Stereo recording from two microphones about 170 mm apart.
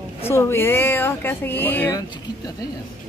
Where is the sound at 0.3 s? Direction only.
15° left (ahead or behind).